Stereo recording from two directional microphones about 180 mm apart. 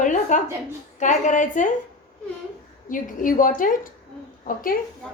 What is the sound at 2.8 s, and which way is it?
A woman's voice, 50° left (ahead or behind).